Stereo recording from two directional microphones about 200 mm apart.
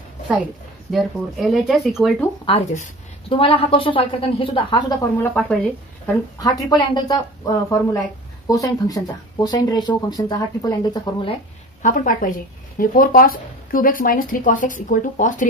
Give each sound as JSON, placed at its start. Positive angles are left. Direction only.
{"t": 0.9, "sound": "speech", "side_deg": 0}
{"t": 2.4, "sound": "speech", "side_deg": 30}
{"t": 5.3, "sound": "speech", "side_deg": 5}
{"t": 6.3, "sound": "speech", "side_deg": 20}
{"t": 11.8, "sound": "a woman's voice", "side_deg": 40}